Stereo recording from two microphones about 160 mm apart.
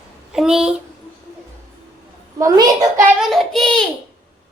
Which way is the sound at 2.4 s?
20° right (ahead or behind).